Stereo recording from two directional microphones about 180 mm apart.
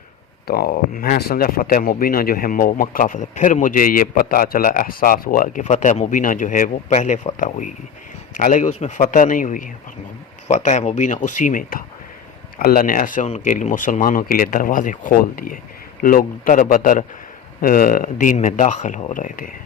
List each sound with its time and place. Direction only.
0.4 s speech: 60° left (ahead or behind)